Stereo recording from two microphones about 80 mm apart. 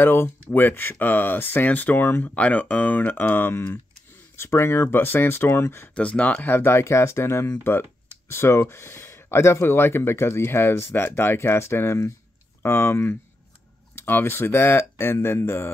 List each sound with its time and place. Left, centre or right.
0.0 s speech: left
5.9 s speech: centre; by 15.7 s left